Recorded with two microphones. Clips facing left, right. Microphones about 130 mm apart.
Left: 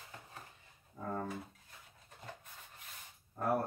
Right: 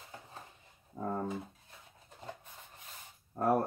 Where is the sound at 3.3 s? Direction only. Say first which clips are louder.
Right 6 dB; 35° right (ahead or behind).